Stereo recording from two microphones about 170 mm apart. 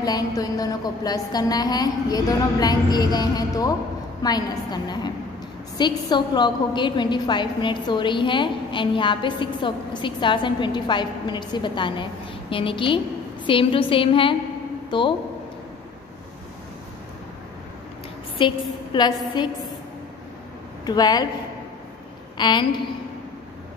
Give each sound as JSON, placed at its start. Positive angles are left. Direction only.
{"t": 0.0, "sound": "a woman's voice", "side_deg": 20}
{"t": 18.4, "sound": "a woman's voice", "side_deg": 25}
{"t": 20.8, "sound": "a woman's voice", "side_deg": 25}
{"t": 22.4, "sound": "a woman's voice", "side_deg": 25}